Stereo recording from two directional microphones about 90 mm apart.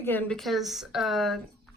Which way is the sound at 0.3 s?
Centre (ahead or behind).